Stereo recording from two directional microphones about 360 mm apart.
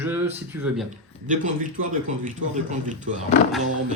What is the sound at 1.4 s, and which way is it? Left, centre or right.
A man's voice, right.